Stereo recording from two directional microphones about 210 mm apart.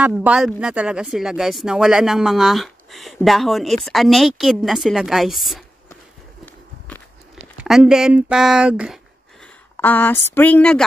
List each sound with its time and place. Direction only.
0.0 s speech: 5° right (ahead or behind)
7.6 s speech: centre (ahead or behind)
9.8 s speech: 10° left (ahead or behind)